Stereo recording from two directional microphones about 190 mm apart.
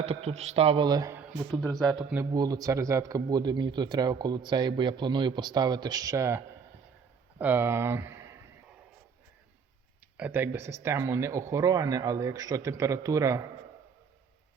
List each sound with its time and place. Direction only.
0.0 s speech: 35° right (ahead or behind); by 1.2 s 20° right (ahead or behind)
1.5 s speech: centre (ahead or behind)
2.3 s speech: 20° right (ahead or behind)
10.2 s speech: 10° right (ahead or behind)